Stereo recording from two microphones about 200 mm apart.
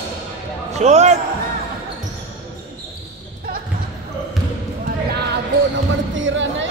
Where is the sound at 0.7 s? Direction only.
35° right (ahead or behind).